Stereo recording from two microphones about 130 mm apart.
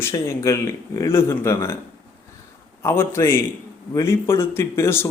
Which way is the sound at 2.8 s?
20° left (ahead or behind).